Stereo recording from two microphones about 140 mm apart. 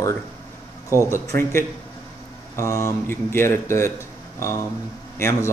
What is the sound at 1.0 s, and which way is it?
A man's voice, 20° left (ahead or behind).